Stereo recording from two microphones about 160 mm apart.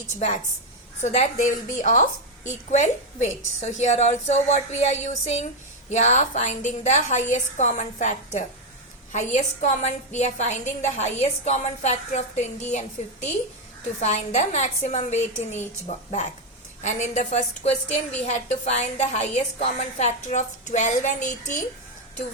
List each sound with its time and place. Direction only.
1.0 s a woman's voice: 45° left (ahead or behind)